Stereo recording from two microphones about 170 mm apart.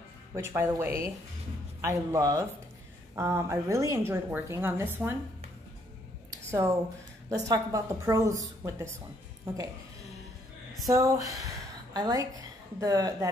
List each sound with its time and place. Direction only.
0.4 s a woman's voice: 15° right (ahead or behind)
6.5 s a woman's voice: 15° right (ahead or behind)
10.9 s a woman's voice: 20° right (ahead or behind)